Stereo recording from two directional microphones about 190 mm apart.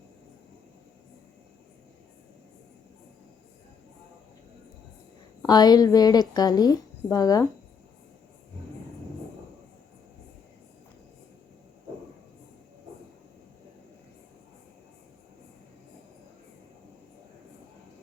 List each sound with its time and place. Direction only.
5.4 s a woman's voice: 20° left (ahead or behind)